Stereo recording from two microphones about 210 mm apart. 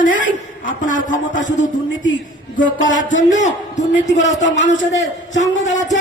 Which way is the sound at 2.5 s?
40° left (ahead or behind).